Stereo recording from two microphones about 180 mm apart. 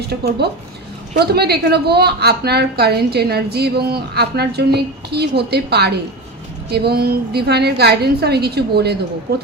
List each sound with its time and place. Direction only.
0.1 s a woman's voice: 65° right (ahead or behind)